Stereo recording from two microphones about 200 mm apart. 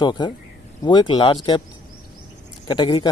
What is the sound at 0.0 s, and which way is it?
Speech, 20° left (ahead or behind).